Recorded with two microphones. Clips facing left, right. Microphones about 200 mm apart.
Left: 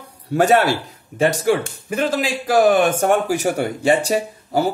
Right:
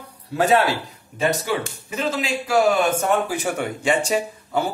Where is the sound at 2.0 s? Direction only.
90° left.